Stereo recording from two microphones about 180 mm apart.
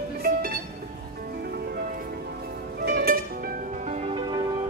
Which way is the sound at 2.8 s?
55° right (ahead or behind).